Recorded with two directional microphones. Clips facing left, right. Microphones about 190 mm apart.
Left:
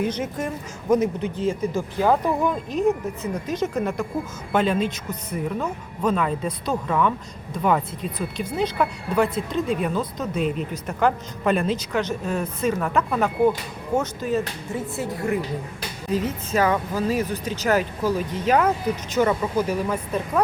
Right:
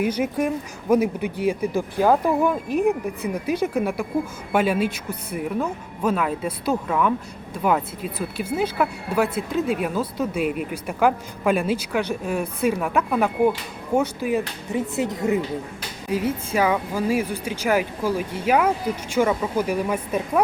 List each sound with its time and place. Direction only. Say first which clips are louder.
0.0 s speech: right 3 dB; 10° right (ahead or behind)